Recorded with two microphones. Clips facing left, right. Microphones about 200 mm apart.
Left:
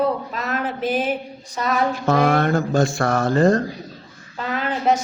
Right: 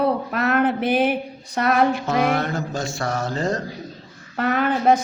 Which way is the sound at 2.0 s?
50° left (ahead or behind).